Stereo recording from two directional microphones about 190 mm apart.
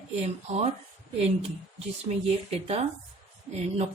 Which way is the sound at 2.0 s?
35° right (ahead or behind).